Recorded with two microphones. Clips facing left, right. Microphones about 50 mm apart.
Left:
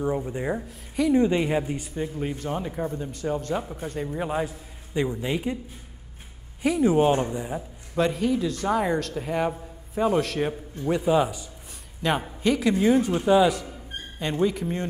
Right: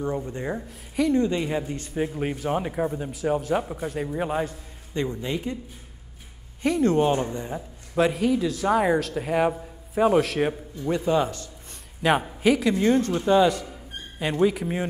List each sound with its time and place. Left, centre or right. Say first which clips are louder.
0.0 s speech: left 2 dB; centre
1.1 s speech: left 2 dB; centre
2.0 s speech: right 2 dB; right
2.3 s a man's voice: right 4 dB; centre
4.9 s speech: left 1 dB; centre
6.6 s a man's voice: even; centre
7.0 s a man's voice: left 1 dB; centre
7.2 s speech: left 1 dB; centre
7.9 s a man's voice: right 2 dB; centre
12.0 s a man's voice: right 3 dB; centre